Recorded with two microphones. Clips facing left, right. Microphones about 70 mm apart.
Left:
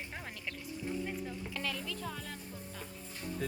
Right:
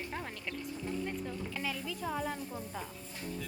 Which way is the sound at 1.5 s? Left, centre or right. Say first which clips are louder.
Left 1 dB; centre.